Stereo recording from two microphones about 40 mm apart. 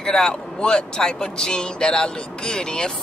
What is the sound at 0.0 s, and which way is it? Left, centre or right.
Speech, centre.